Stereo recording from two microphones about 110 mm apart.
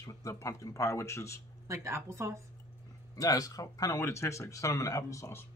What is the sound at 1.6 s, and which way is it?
Speech, 25° right (ahead or behind).